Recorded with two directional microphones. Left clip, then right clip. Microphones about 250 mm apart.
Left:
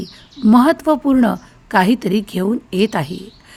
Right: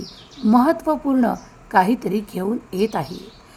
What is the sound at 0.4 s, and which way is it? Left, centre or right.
A woman's voice, left.